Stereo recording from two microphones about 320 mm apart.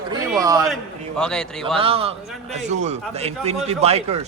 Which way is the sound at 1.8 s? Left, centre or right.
Centre.